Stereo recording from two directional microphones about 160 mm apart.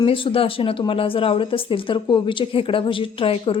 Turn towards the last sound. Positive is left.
turn(degrees=35)  # may be behind; listen again after turning